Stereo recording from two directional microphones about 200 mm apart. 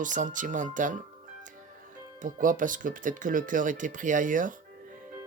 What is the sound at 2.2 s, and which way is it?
Speech, 40° right (ahead or behind).